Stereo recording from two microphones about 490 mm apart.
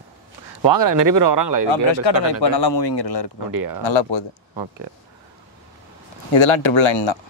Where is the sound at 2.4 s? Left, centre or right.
Left.